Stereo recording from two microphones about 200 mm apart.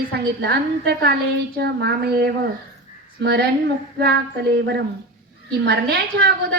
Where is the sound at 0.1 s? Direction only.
55° right (ahead or behind).